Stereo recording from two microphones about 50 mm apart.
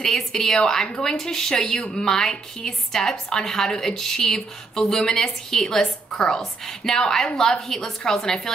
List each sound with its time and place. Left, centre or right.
0.0 s a woman's voice: centre